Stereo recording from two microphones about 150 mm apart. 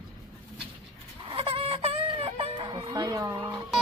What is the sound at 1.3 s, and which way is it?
Music, 40° right (ahead or behind).